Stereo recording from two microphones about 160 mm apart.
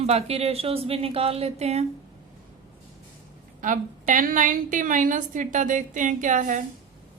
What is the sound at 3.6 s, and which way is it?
A woman's voice, 55° right (ahead or behind).